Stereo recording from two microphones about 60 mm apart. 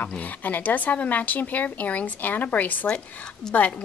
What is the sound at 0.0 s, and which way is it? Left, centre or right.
A woman's voice, left.